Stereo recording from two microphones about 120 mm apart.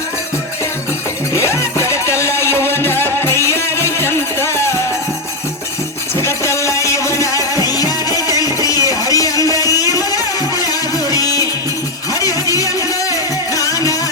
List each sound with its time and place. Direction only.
1.3 s music: 25° left (ahead or behind)
6.1 s music: 25° left (ahead or behind)